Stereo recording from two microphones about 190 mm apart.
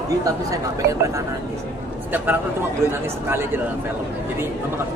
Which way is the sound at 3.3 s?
10° right (ahead or behind).